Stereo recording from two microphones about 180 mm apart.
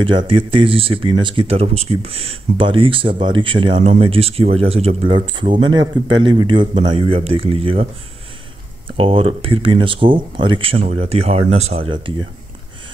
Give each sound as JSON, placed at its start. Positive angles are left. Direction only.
{"t": 0.3, "sound": "speech", "side_deg": -30}
{"t": 8.8, "sound": "speech", "side_deg": -30}